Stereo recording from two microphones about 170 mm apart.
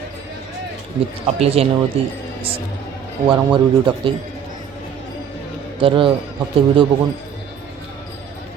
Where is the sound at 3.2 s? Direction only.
30° right (ahead or behind).